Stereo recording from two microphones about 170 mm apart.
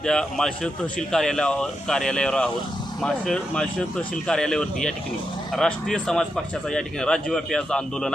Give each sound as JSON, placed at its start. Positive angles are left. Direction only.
{"t": 0.0, "sound": "a man's voice", "side_deg": 5}